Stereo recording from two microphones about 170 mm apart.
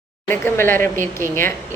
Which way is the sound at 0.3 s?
15° left (ahead or behind).